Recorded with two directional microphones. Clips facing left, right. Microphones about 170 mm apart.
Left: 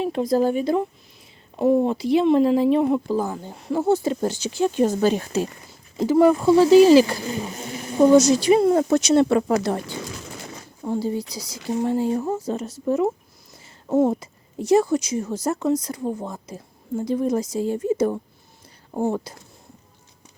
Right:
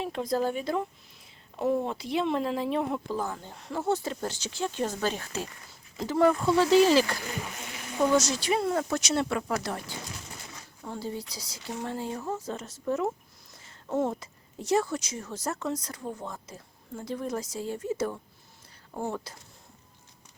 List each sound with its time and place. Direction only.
0.1 s speech: 35° left (ahead or behind)
1.5 s speech: 30° left (ahead or behind)
2.0 s speech: 5° left (ahead or behind)
7.2 s speech: 30° left (ahead or behind)
8.1 s speech: 15° left (ahead or behind)
10.8 s speech: 15° left (ahead or behind)
14.2 s speech: 10° left (ahead or behind)